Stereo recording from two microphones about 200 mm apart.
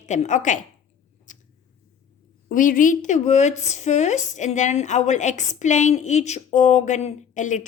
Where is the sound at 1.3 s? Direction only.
40° left (ahead or behind).